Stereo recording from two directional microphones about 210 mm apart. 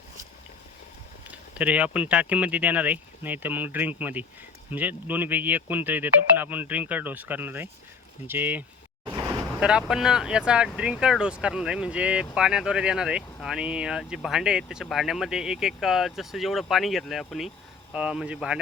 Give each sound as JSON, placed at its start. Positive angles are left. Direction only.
{"t": 1.5, "sound": "speech", "side_deg": -5}
{"t": 9.0, "sound": "vehicle", "side_deg": -20}
{"t": 9.6, "sound": "speech", "side_deg": -5}